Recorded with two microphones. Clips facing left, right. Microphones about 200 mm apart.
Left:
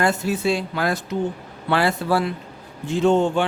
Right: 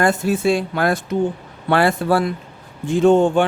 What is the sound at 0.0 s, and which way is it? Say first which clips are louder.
A man's voice: right 4 dB; 50° right (ahead or behind).